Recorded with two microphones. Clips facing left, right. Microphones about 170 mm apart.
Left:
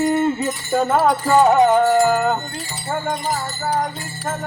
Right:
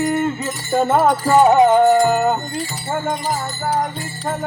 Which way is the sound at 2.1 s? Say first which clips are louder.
Right 1 dB; 20° right (ahead or behind).